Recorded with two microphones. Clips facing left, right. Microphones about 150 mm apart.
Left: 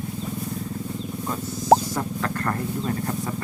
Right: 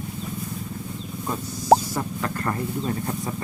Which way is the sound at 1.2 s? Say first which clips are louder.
Even; 10° right (ahead or behind).